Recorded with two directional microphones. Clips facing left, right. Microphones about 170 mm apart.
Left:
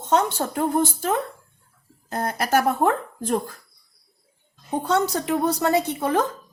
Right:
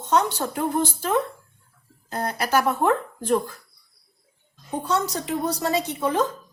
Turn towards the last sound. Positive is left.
turn(degrees=60)  # may be behind; listen again after turning